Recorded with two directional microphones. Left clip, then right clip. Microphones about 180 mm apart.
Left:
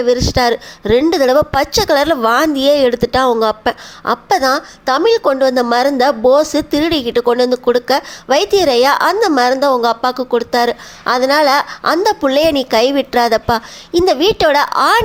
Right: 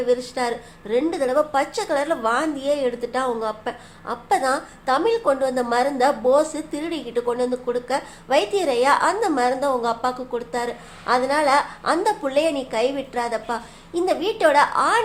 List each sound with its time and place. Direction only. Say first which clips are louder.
0.0 s a woman's voice: left 9 dB; 45° left (ahead or behind)